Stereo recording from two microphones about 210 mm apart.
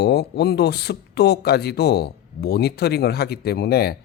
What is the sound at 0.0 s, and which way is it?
Speech, 50° left (ahead or behind).